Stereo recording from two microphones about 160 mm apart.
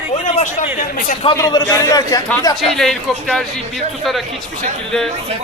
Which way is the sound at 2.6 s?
Centre (ahead or behind).